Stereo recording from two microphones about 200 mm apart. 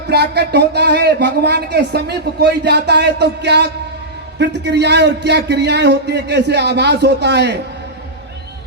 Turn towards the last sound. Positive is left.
turn(degrees=-60)  # may be behind; listen again after turning